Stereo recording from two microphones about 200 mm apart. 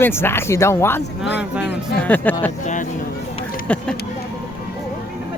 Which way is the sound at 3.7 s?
5° left (ahead or behind).